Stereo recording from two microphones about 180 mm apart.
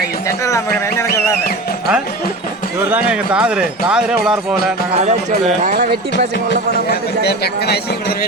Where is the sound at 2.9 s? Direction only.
5° right (ahead or behind).